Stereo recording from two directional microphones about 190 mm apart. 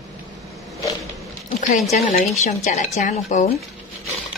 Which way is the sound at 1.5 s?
40° left (ahead or behind).